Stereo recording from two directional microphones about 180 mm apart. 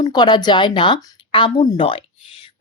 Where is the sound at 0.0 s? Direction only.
25° left (ahead or behind).